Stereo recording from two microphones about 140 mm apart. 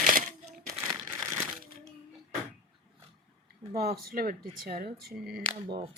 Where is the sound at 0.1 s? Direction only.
75° right (ahead or behind).